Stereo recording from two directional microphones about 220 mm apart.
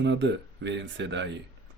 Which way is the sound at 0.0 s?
55° right (ahead or behind).